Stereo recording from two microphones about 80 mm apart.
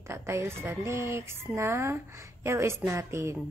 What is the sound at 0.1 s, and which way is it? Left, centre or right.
Speech, right.